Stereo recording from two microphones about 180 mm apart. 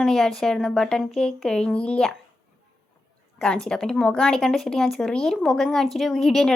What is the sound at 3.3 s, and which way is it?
Speech, 5° left (ahead or behind).